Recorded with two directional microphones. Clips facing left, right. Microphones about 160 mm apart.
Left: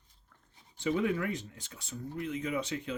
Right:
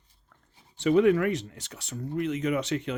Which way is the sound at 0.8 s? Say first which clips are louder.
Right 9 dB; 75° right (ahead or behind).